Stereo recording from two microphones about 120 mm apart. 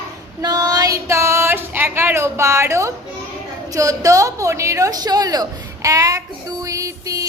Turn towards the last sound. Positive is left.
turn(degrees=-30)  # may be behind; listen again after turning